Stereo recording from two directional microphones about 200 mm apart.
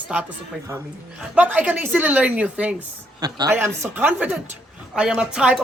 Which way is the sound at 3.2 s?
20° right (ahead or behind).